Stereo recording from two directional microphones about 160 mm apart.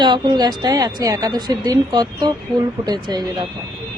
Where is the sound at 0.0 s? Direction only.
25° right (ahead or behind).